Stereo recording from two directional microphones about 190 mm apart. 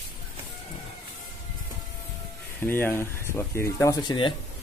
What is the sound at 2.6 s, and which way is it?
Speech, 10° left (ahead or behind).